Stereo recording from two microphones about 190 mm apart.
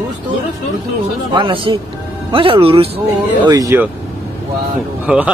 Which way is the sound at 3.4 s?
20° right (ahead or behind).